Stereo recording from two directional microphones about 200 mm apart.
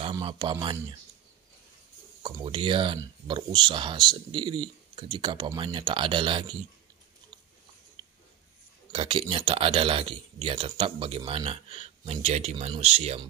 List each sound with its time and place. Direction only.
0.0 s speech: 25° right (ahead or behind)
2.2 s speech: 25° right (ahead or behind)
8.9 s speech: 25° right (ahead or behind)